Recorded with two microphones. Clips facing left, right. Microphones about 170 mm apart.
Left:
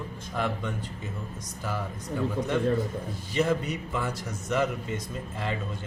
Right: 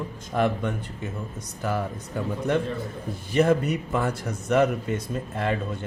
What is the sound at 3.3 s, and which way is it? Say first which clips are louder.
A man's voice: right 6 dB; 55° right (ahead or behind).